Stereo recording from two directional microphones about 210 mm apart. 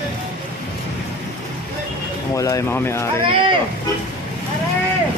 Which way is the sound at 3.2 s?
25° right (ahead or behind).